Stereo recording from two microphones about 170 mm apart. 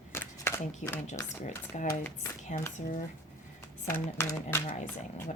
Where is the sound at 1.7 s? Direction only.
45° left (ahead or behind).